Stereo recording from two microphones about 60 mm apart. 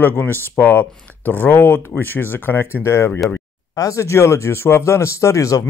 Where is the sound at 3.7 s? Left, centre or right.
Left.